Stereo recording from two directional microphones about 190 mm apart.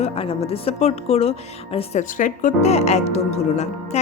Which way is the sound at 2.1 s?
45° left (ahead or behind).